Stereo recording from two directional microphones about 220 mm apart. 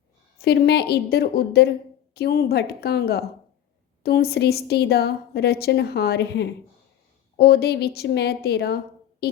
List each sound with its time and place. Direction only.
0.3 s a woman's voice: 45° left (ahead or behind)